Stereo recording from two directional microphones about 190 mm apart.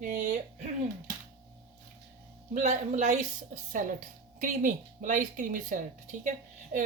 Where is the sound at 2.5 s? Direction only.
40° right (ahead or behind).